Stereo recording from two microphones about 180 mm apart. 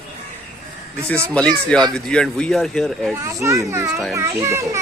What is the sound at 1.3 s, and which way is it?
Speech, 5° left (ahead or behind).